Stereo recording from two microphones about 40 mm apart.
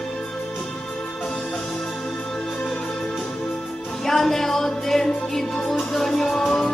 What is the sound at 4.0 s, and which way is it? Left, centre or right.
Music, centre.